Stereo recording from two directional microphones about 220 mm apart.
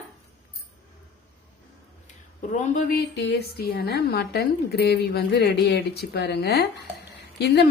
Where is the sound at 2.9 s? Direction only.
50° left (ahead or behind).